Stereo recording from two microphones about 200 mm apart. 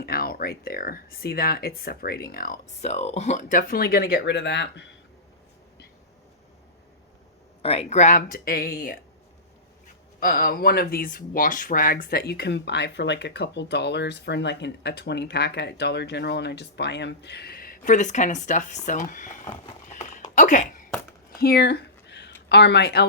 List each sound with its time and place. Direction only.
0.0 s speech: 50° left (ahead or behind)
7.6 s speech: 30° left (ahead or behind)
10.2 s speech: 45° left (ahead or behind)
21.4 s a sound: 55° left (ahead or behind)